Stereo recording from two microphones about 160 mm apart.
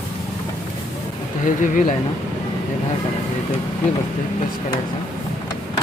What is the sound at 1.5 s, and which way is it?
Speech, 55° left (ahead or behind).